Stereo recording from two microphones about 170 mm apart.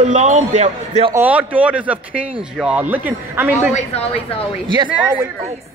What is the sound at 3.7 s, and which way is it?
Speech, 35° left (ahead or behind).